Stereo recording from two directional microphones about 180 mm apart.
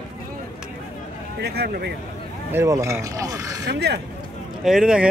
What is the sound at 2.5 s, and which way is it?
Speech, 15° right (ahead or behind).